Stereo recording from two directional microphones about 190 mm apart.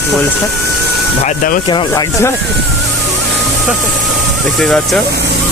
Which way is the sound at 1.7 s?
20° left (ahead or behind).